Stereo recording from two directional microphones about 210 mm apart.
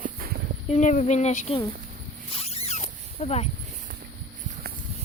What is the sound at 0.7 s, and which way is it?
Speech, 35° left (ahead or behind).